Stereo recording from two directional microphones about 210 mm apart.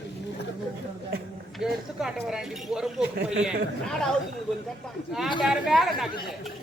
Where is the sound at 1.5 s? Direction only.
Centre (ahead or behind).